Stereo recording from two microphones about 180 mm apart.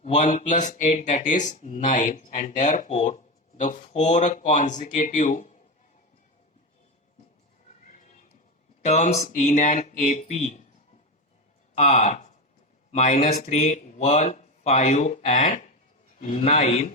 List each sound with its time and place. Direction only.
0.0 s speech: 40° left (ahead or behind)
8.8 s speech: 40° left (ahead or behind)
11.7 s speech: 40° left (ahead or behind)